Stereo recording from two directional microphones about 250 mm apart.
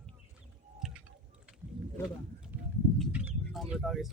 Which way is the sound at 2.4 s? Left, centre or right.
Centre.